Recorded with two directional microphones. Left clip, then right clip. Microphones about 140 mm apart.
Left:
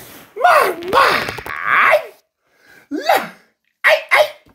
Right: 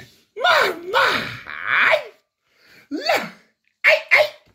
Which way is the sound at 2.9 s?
20° right (ahead or behind).